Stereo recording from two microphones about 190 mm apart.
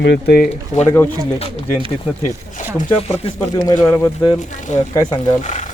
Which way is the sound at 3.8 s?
15° left (ahead or behind).